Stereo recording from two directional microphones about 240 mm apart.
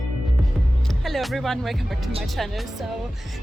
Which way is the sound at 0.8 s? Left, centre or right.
Centre.